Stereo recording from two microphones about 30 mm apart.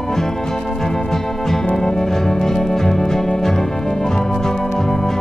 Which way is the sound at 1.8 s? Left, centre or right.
Centre.